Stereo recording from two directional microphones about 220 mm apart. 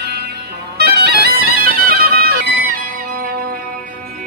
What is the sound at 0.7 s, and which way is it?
Music, 45° right (ahead or behind).